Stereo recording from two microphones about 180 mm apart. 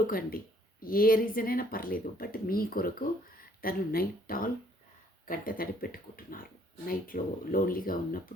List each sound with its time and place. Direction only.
0.1 s speech: 55° left (ahead or behind)